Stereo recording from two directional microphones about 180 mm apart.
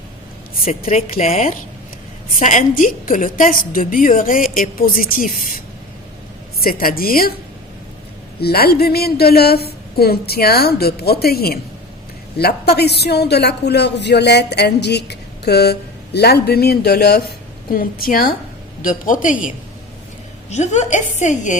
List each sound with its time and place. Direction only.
0.6 s a woman's voice: 35° left (ahead or behind); by 7.3 s 55° left (ahead or behind)
8.4 s a woman's voice: 60° left (ahead or behind); by 21.6 s 45° left (ahead or behind)